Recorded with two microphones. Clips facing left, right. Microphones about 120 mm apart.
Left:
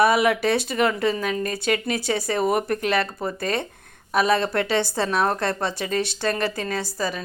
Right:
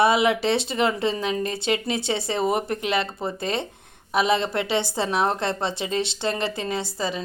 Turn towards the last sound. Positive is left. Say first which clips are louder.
# even
turn(degrees=-20)  # may be behind; listen again after turning